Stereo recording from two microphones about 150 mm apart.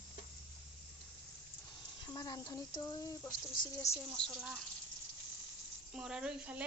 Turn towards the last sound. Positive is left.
turn(degrees=-10)  # may be behind; listen again after turning